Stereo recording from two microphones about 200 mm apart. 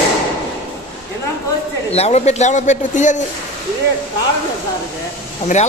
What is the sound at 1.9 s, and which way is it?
Speech, 35° left (ahead or behind).